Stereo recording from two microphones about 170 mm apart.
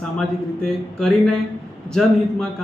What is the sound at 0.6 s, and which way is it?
A man's voice, 5° left (ahead or behind).